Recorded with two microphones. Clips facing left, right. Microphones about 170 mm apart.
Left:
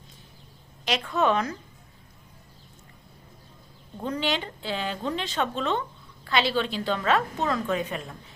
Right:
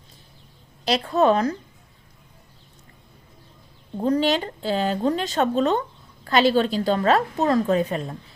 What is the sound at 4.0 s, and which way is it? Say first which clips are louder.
A woman's voice: right 8 dB; 35° right (ahead or behind).